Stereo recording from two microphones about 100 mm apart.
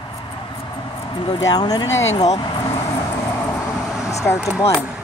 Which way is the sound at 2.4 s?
50° left (ahead or behind).